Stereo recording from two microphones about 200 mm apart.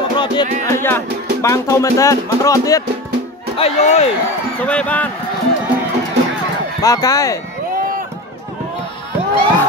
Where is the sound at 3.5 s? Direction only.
30° left (ahead or behind).